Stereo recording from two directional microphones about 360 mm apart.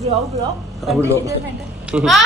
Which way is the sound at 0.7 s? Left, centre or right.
Centre.